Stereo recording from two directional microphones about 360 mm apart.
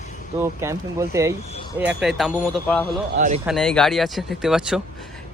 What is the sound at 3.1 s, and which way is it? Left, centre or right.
Speech, right.